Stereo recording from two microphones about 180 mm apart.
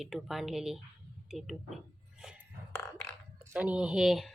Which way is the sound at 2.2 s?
5° right (ahead or behind).